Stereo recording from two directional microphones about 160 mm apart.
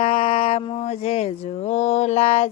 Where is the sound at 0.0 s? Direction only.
35° left (ahead or behind).